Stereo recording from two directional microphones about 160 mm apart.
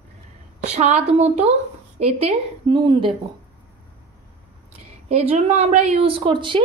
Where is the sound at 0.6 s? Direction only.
45° right (ahead or behind).